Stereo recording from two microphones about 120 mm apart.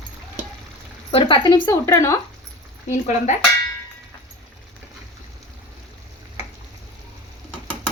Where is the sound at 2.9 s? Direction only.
75° left (ahead or behind).